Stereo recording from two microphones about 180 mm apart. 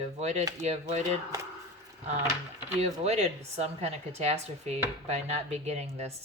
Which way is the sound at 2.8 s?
35° right (ahead or behind).